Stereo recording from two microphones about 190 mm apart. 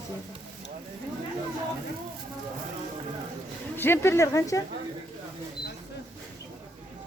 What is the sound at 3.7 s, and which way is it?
Speech, 10° left (ahead or behind).